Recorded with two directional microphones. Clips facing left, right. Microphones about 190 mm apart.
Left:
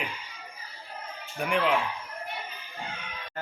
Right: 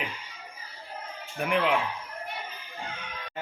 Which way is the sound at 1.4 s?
Centre (ahead or behind).